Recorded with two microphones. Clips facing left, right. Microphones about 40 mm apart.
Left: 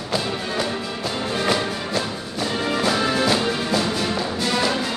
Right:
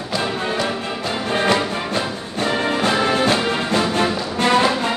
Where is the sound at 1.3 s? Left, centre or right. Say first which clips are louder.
Right 5 dB; right.